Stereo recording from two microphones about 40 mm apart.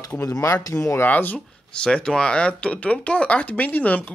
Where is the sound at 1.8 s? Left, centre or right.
Left.